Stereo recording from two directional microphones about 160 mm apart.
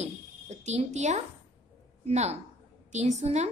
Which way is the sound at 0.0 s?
45° right (ahead or behind).